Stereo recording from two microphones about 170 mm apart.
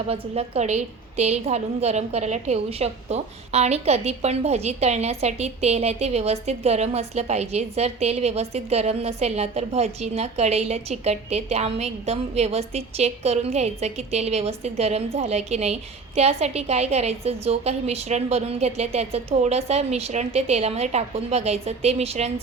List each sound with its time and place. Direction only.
0.1 s a woman's voice: 35° right (ahead or behind)